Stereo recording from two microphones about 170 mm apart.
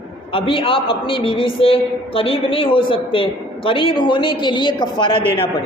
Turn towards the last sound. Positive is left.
turn(degrees=35)  # may be behind; listen again after turning